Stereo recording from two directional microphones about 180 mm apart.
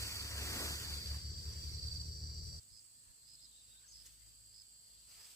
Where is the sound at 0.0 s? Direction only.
15° left (ahead or behind).